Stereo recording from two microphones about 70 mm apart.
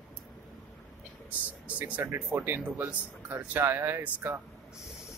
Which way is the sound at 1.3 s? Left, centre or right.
Right.